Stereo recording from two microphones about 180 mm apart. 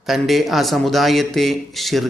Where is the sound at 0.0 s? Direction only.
Centre (ahead or behind).